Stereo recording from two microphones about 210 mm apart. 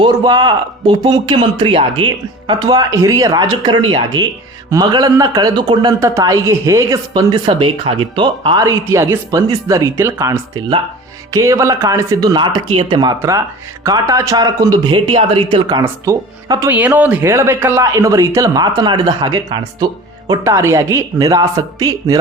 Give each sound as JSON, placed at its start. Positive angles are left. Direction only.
{"t": 0.0, "sound": "speech", "side_deg": -20}
{"t": 15.8, "sound": "speech", "side_deg": -15}